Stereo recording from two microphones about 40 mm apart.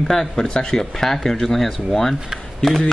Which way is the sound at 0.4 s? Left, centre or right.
Centre.